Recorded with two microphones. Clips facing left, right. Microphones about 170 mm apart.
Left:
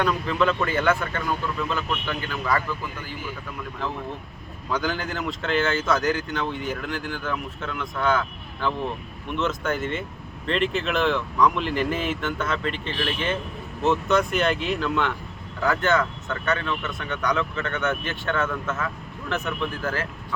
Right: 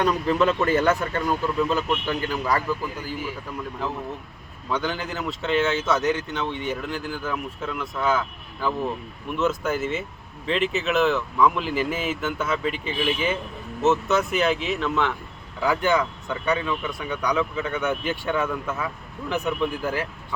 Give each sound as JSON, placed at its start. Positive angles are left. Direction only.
{"t": 0.0, "sound": "speech", "side_deg": -40}
{"t": 4.7, "sound": "speech", "side_deg": 0}
{"t": 9.3, "sound": "speech", "side_deg": -5}
{"t": 15.6, "sound": "speech", "side_deg": -10}